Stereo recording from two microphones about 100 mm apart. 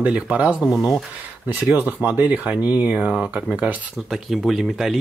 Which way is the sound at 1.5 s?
20° right (ahead or behind).